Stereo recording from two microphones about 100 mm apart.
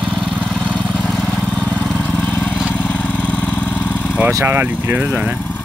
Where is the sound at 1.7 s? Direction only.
15° left (ahead or behind).